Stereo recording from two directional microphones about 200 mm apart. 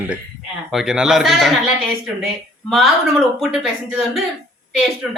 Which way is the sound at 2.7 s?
Centre (ahead or behind).